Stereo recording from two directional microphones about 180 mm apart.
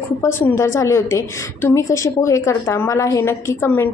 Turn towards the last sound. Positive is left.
turn(degrees=15)  # may be behind; listen again after turning